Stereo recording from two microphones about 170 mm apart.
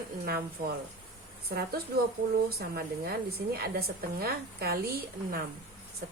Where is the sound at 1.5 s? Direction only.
60° right (ahead or behind).